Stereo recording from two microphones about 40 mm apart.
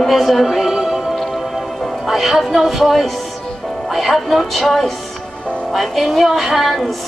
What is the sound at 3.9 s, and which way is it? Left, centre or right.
Music, centre.